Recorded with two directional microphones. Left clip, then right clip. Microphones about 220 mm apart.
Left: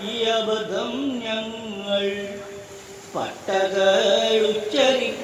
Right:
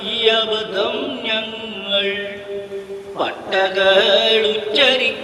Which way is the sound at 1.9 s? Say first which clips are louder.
Right 5 dB; 50° right (ahead or behind).